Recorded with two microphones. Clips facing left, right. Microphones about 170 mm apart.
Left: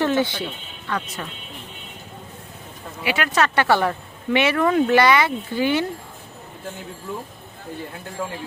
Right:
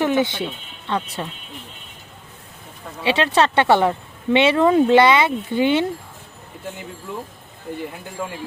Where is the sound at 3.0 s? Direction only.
30° right (ahead or behind).